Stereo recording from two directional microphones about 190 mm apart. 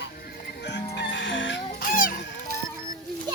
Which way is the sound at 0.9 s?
65° left (ahead or behind).